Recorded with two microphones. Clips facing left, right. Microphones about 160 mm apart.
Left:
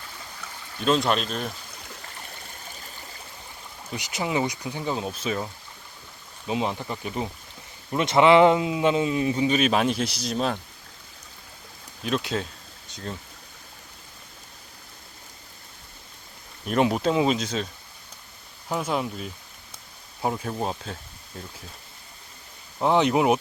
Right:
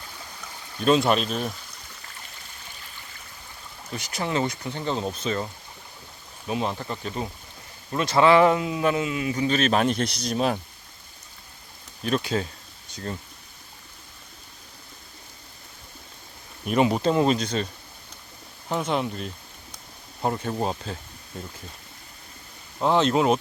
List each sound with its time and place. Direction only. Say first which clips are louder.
0.9 s speech: right 2 dB; 5° right (ahead or behind)
3.8 s speech: even; 15° left (ahead or behind)
6.5 s speech: left 1 dB; 15° left (ahead or behind)
9.4 s speech: right 1 dB; 15° left (ahead or behind)
9.7 s speech: right 1 dB; 5° left (ahead or behind)
10.3 s speech: right 2 dB; 5° right (ahead or behind)
12.0 s speech: right 2 dB; centre (ahead or behind)
16.6 s speech: right 1 dB; centre (ahead or behind)
18.7 s speech: right 1 dB; 5° left (ahead or behind)
22.8 s speech: even; 15° left (ahead or behind)